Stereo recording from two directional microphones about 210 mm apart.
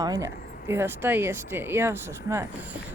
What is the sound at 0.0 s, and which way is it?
Speech, 15° right (ahead or behind).